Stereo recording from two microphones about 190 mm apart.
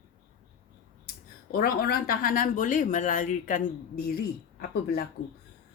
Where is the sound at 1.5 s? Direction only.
50° left (ahead or behind).